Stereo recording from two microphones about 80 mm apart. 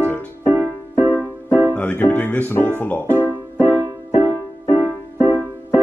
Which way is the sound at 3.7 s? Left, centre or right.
Right.